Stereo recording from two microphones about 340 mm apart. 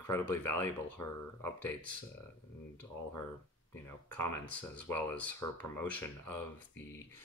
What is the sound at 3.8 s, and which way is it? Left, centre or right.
Speech, centre.